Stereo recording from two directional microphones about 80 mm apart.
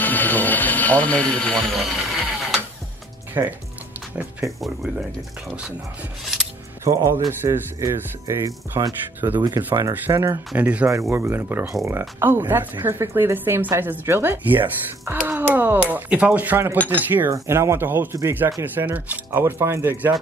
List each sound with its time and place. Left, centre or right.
0.0 s speech: left
1.8 s music: centre
3.4 s speech: right
4.4 s speech: right
6.8 s speech: right
9.2 s speech: right
10.0 s speech: right
10.5 s speech: centre
10.9 s speech: right
17.3 s speech: right